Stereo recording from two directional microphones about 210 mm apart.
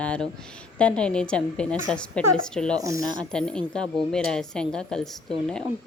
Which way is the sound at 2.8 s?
15° right (ahead or behind).